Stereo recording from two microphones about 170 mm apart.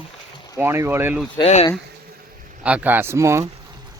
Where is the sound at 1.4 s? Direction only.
35° left (ahead or behind).